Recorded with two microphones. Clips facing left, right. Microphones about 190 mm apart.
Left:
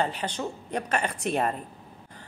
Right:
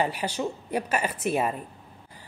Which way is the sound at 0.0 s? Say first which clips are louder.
Right 2 dB; 10° right (ahead or behind).